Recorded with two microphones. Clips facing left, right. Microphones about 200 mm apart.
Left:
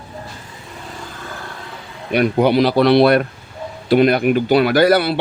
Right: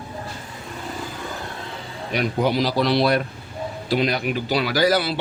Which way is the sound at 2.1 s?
60° left (ahead or behind).